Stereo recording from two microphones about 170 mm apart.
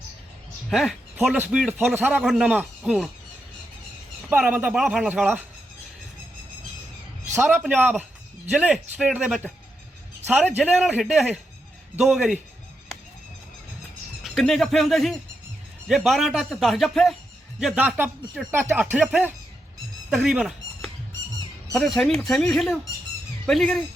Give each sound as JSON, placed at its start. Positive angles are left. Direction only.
{"t": 0.7, "sound": "a man's voice", "side_deg": 0}
{"t": 4.3, "sound": "a man's voice", "side_deg": -5}
{"t": 7.4, "sound": "a man's voice", "side_deg": -5}
{"t": 10.6, "sound": "a man's voice", "side_deg": -5}
{"t": 14.3, "sound": "a man's voice", "side_deg": 0}
{"t": 20.1, "sound": "chicken", "side_deg": -5}
{"t": 21.7, "sound": "a man's voice", "side_deg": 0}